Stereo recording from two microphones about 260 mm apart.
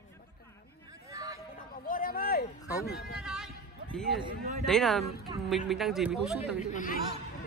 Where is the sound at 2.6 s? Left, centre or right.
Centre.